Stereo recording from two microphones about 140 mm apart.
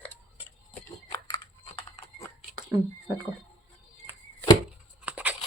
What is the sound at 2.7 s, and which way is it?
Speech, 15° right (ahead or behind).